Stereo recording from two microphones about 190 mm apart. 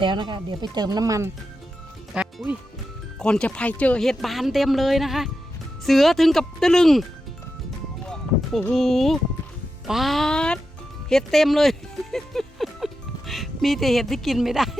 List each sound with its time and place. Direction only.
0.0 s speech: 25° right (ahead or behind)
2.1 s speech: 5° right (ahead or behind)
3.2 s speech: 5° left (ahead or behind)
8.0 s a sound: centre (ahead or behind)
8.7 s speech: centre (ahead or behind)